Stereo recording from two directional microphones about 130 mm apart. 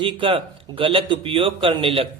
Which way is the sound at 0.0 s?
40° right (ahead or behind).